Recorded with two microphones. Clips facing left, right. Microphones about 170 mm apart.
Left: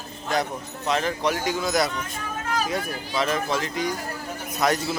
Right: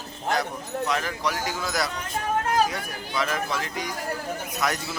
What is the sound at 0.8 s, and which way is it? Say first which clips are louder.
Speech: left 5 dB; 25° left (ahead or behind).